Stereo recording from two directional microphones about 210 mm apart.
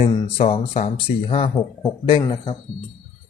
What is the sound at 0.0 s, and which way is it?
Speech, 25° left (ahead or behind).